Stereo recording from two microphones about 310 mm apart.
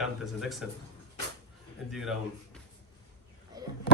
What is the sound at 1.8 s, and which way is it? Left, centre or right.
Speech, centre.